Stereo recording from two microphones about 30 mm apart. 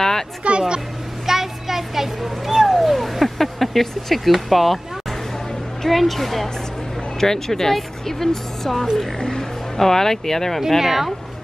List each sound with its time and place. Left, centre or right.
0.4 s speech: right
1.2 s a sound: centre
5.9 s speech: centre
7.2 s speech: centre
10.8 s speech: centre